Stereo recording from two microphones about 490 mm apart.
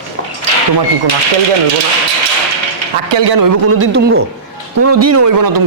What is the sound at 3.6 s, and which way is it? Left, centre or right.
A man's voice, right.